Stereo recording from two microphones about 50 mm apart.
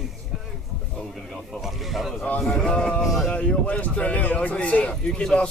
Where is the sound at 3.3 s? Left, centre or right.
Left.